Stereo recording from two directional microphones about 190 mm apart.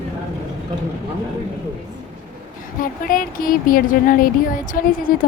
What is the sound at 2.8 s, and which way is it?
Speech, 50° left (ahead or behind).